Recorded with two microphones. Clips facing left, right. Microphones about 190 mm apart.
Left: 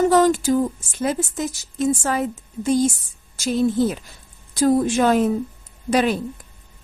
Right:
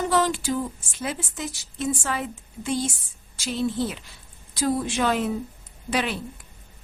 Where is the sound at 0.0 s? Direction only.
45° left (ahead or behind).